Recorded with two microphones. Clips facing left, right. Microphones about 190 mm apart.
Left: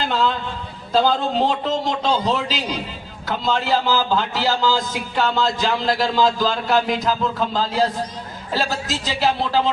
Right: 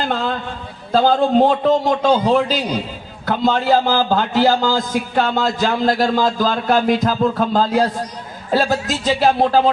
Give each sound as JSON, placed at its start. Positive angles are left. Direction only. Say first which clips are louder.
{"t": 0.0, "sound": "a man's voice", "louder": "even", "side_deg": -50}